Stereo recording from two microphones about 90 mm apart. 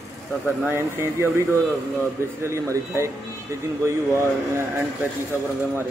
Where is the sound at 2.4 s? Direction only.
30° right (ahead or behind).